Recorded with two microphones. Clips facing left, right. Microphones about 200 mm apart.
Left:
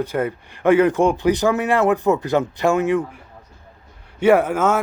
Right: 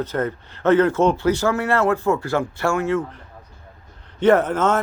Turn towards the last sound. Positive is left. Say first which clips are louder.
# left 1 dB
turn(degrees=10)  # may be behind; listen again after turning